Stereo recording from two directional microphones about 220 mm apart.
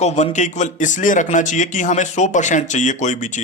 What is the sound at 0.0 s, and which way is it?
Speech, 30° left (ahead or behind).